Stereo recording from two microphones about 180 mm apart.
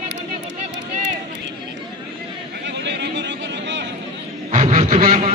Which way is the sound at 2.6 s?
75° right (ahead or behind).